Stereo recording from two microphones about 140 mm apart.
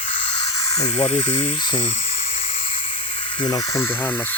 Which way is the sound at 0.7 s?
25° left (ahead or behind).